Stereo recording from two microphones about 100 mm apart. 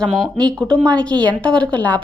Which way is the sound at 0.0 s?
5° left (ahead or behind).